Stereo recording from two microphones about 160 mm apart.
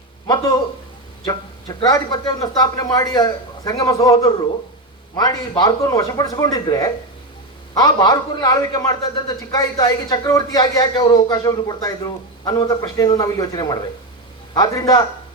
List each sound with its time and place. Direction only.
0.3 s speech: 25° left (ahead or behind)
5.1 s speech: 25° left (ahead or behind)